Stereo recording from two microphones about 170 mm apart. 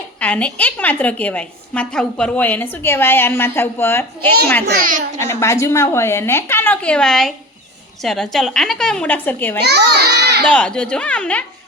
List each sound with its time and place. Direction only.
0.2 s a woman's voice: 10° left (ahead or behind)
4.6 s a child's voice: 55° right (ahead or behind)
5.2 s a woman's voice: 15° left (ahead or behind)
9.6 s a sound: 75° right (ahead or behind)
10.5 s a woman's voice: 5° left (ahead or behind)